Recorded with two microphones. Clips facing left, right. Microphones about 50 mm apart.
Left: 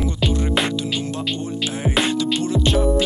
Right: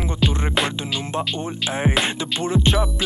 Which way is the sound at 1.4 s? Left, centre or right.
Right.